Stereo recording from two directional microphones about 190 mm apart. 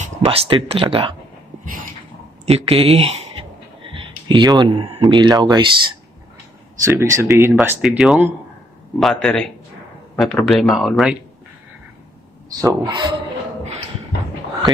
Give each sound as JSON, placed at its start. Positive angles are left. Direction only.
{"t": 0.0, "sound": "speech", "side_deg": -30}
{"t": 1.6, "sound": "a sound", "side_deg": -45}
{"t": 2.4, "sound": "speech", "side_deg": -30}
{"t": 3.9, "sound": "a sound", "side_deg": -25}
{"t": 5.0, "sound": "a man's voice", "side_deg": -20}
{"t": 12.4, "sound": "speech", "side_deg": -20}